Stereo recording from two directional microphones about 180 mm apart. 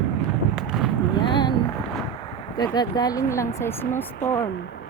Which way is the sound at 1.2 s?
25° left (ahead or behind).